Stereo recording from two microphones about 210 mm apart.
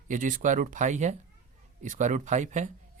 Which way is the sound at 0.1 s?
40° right (ahead or behind).